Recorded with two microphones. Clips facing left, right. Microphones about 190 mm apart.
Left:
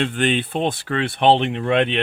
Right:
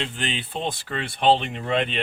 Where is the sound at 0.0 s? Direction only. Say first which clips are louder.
Left 9 dB; 60° left (ahead or behind).